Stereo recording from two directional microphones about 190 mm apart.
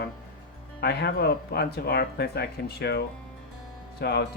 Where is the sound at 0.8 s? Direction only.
60° left (ahead or behind).